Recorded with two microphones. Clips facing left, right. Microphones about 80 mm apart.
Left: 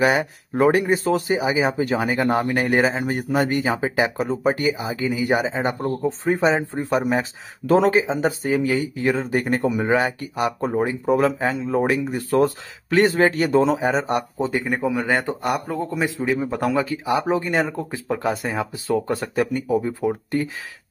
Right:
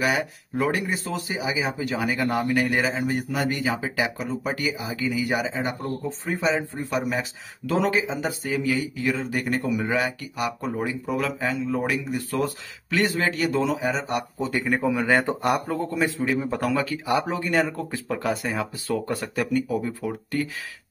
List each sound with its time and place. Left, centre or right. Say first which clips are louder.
0.0 s speech: left 5 dB; left
14.5 s speech: right 1 dB; centre
14.8 s speech: right 2 dB; centre
15.9 s speech: left 2 dB; centre